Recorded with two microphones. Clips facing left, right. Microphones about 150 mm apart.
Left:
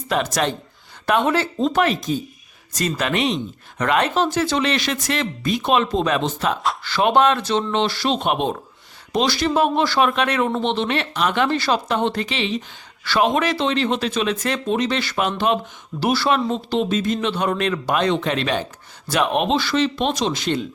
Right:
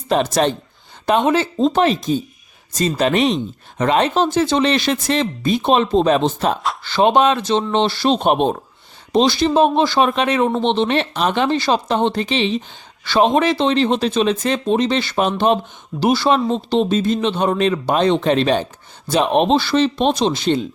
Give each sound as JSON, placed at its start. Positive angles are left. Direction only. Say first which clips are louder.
{"t": 0.1, "sound": "speech", "louder": "right 5 dB", "side_deg": -30}
{"t": 9.1, "sound": "speech", "louder": "right 5 dB", "side_deg": -25}
{"t": 16.0, "sound": "speech", "louder": "right 4 dB", "side_deg": -20}